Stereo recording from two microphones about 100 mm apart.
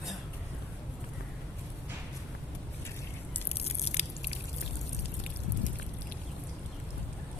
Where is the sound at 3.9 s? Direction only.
90° left.